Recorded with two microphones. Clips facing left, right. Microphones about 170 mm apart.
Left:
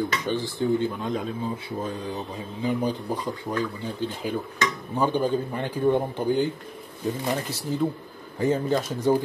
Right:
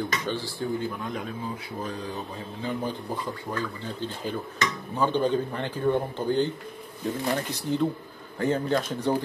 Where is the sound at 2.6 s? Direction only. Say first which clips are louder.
Left 5 dB; 15° left (ahead or behind).